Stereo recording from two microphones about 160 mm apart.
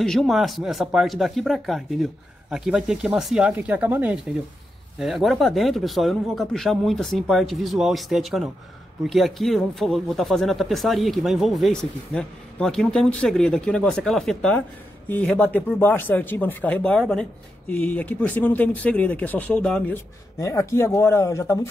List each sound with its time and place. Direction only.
0.0 s speech: centre (ahead or behind); by 21.5 s 20° left (ahead or behind)